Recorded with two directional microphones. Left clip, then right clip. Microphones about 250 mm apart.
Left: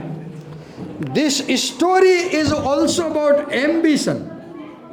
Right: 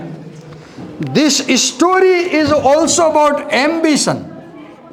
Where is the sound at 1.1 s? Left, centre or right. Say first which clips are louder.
Right 6 dB; centre.